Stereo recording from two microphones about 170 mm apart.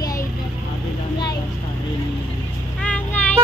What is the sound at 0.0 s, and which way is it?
Vehicle, 20° left (ahead or behind).